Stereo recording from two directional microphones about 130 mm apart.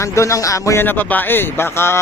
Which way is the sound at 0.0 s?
20° left (ahead or behind).